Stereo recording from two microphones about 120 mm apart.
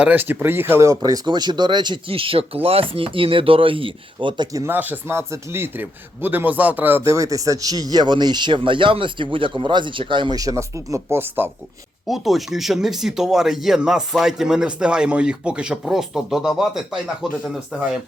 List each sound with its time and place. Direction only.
0.0 s speech: 15° right (ahead or behind); by 4.4 s 45° right (ahead or behind)
4.5 s speech: 20° right (ahead or behind)
12.0 s speech: centre (ahead or behind)